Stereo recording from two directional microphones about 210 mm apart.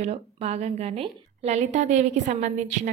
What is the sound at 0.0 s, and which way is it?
A woman's voice, 30° right (ahead or behind).